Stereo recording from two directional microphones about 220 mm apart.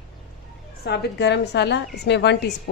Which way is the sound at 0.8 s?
50° left (ahead or behind).